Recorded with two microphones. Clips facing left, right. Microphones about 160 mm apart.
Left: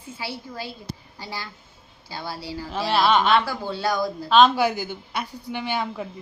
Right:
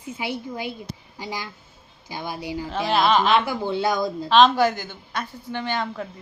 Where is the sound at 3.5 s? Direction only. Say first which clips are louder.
Right 3 dB; 20° right (ahead or behind).